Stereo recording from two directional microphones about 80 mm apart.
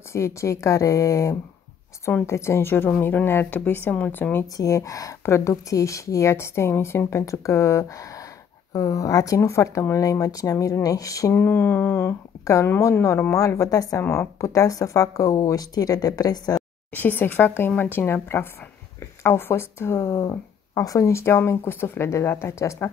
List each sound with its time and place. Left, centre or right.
0.1 s a woman's voice: left
4.6 s a woman's voice: left
11.3 s a woman's voice: left
12.6 s a woman's voice: left
16.9 s a woman's voice: left
20.2 s a woman's voice: left